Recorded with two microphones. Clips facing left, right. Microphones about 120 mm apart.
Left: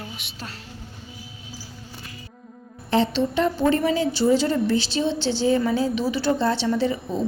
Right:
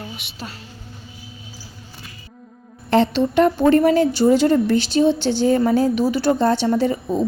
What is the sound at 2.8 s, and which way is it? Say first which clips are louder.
A woman's voice: right 4 dB; 60° right (ahead or behind).